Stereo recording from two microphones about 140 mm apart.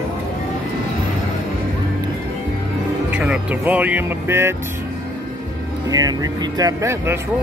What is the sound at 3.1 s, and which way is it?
Speech, 5° right (ahead or behind).